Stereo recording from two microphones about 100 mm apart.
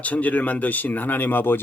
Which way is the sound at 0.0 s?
15° left (ahead or behind).